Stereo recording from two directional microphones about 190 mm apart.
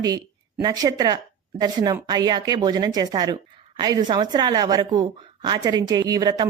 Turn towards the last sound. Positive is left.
turn(degrees=-20)  # may be behind; listen again after turning